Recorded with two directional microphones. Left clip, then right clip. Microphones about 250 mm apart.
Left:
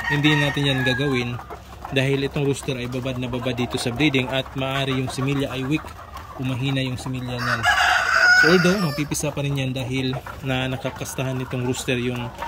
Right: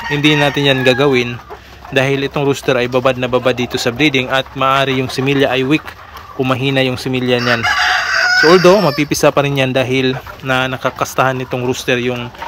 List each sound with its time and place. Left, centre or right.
0.1 s speech: centre
7.8 s crowing: left
8.5 s speech: centre